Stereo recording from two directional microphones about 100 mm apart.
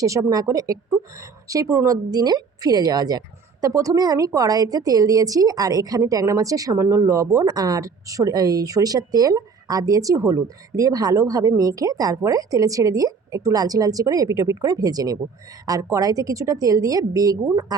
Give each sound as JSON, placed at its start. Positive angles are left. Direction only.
{"t": 0.0, "sound": "speech", "side_deg": -35}